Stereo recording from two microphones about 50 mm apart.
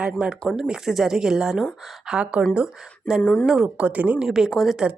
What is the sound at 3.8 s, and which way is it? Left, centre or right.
Speech, right.